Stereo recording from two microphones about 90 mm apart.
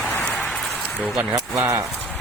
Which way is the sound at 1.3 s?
30° right (ahead or behind).